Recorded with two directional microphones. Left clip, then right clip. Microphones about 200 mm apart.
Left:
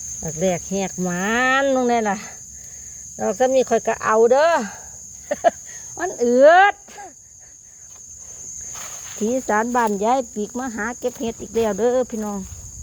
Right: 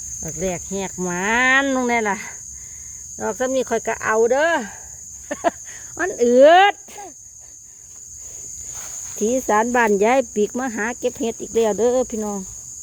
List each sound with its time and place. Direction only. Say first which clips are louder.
0.3 s speech: left 4 dB; centre (ahead or behind); by 5.5 s 15° right (ahead or behind)
6.0 s speech: right 2 dB; 30° right (ahead or behind)
9.1 s speech: right 2 dB; 20° right (ahead or behind)